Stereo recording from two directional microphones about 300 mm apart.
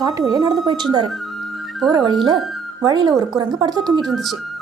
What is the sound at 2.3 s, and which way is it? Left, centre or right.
Speech, centre.